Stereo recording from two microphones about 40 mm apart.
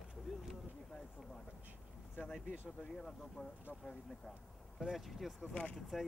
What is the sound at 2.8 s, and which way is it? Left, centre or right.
Speech, left.